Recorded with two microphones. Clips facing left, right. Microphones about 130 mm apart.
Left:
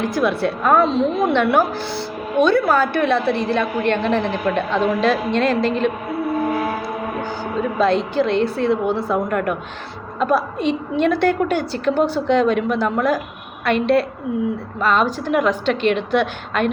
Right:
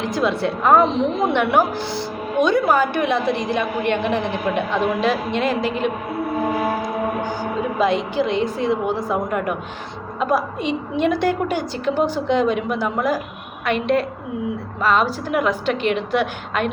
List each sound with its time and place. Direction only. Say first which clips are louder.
0.0 s a woman's voice: left 1 dB; 20° right (ahead or behind)
6.8 s a sound: right 2 dB; 15° right (ahead or behind)
7.8 s a woman's voice: left 2 dB; 15° right (ahead or behind)